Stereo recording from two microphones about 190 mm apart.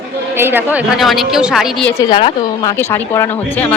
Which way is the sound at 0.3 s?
10° right (ahead or behind).